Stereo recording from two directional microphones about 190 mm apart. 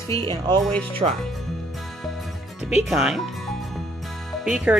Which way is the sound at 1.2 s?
Centre (ahead or behind).